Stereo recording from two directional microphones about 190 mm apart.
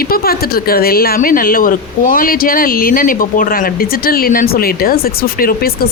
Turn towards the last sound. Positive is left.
turn(degrees=50)  # may be behind; listen again after turning